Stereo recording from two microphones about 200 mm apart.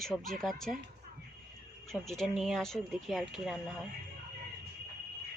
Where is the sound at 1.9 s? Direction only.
Centre (ahead or behind).